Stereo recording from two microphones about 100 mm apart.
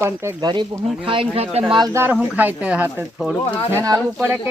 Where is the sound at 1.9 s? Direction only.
25° right (ahead or behind).